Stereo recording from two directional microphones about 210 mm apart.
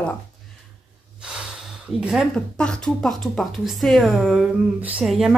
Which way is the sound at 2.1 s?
Centre (ahead or behind).